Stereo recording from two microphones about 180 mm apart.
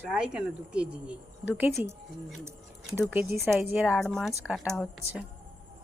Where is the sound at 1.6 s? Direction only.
15° right (ahead or behind).